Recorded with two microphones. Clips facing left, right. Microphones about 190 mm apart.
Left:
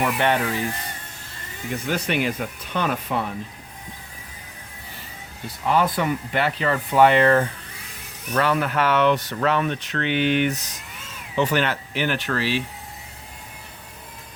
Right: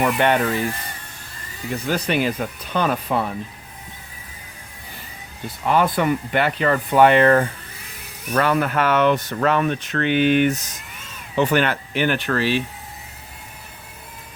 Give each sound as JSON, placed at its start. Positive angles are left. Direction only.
{"t": 0.0, "sound": "speech", "side_deg": -55}
{"t": 1.7, "sound": "speech", "side_deg": -35}
{"t": 5.6, "sound": "speech", "side_deg": -60}